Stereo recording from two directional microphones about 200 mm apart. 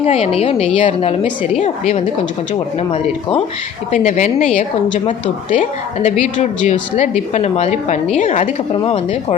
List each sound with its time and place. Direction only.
0.0 s a woman's voice: 30° left (ahead or behind)
8.7 s speech: 25° left (ahead or behind)